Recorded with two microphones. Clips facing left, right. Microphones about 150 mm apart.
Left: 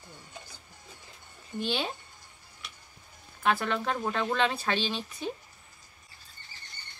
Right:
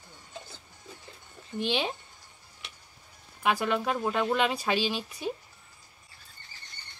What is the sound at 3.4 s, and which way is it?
Speech, 10° right (ahead or behind).